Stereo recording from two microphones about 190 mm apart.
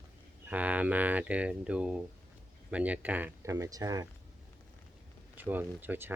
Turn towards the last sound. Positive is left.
turn(degrees=-10)  # may be behind; listen again after turning